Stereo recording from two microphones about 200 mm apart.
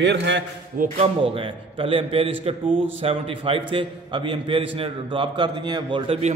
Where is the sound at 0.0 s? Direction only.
65° right (ahead or behind).